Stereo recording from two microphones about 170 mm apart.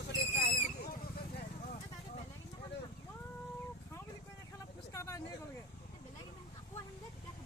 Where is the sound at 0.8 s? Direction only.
60° left (ahead or behind).